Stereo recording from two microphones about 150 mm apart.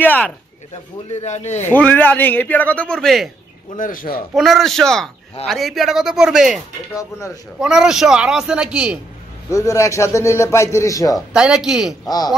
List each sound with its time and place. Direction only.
0.0 s speech: 10° left (ahead or behind)
1.1 s speech: 50° left (ahead or behind)
1.7 s speech: 10° left (ahead or behind)
3.7 s a man's voice: 65° left (ahead or behind)
4.4 s a man's voice: centre (ahead or behind)
7.0 s a man's voice: 20° left (ahead or behind)
7.6 s a man's voice: 5° right (ahead or behind)
9.5 s a man's voice: 20° left (ahead or behind)
11.1 s a man's voice: 5° right (ahead or behind)